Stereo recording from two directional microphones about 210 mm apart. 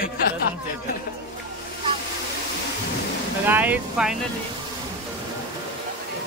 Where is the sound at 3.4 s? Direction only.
10° right (ahead or behind).